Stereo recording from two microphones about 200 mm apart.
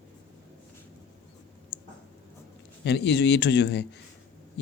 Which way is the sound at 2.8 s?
60° left (ahead or behind).